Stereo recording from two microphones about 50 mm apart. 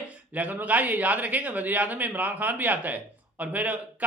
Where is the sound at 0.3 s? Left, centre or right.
Right.